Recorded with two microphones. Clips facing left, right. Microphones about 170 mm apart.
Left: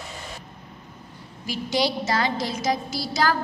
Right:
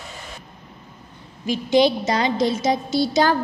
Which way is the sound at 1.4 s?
20° right (ahead or behind).